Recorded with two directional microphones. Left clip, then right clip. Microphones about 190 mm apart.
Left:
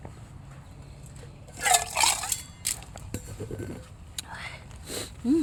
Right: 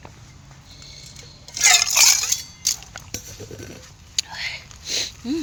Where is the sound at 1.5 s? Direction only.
15° left (ahead or behind).